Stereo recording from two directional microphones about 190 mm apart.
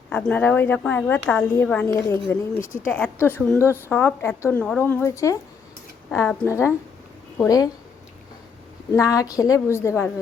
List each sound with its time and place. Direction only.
0.1 s a woman's voice: 5° left (ahead or behind)
8.9 s a woman's voice: 15° left (ahead or behind)